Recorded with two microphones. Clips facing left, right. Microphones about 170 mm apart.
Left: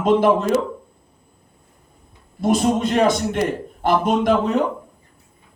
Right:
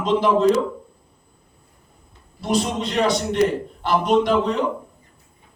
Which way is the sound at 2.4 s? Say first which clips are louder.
Left 5 dB; 50° left (ahead or behind).